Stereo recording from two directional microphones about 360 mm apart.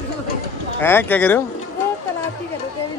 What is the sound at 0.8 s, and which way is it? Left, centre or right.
Speech, centre.